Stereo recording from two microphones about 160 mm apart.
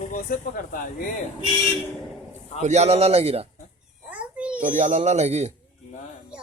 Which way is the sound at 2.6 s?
45° right (ahead or behind).